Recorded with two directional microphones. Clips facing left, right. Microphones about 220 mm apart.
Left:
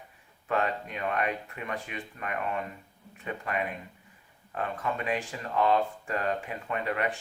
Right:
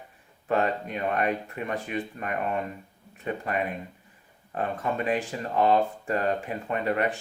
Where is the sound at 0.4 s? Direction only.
40° right (ahead or behind).